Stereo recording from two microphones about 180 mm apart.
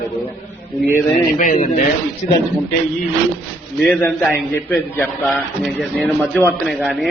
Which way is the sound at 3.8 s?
5° left (ahead or behind).